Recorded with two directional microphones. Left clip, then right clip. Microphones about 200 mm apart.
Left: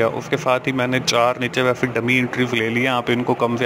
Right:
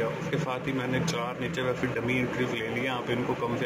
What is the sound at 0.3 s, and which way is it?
Speech, 50° left (ahead or behind).